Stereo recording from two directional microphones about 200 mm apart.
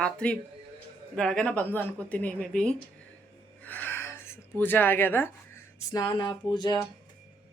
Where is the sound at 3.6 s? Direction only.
10° left (ahead or behind).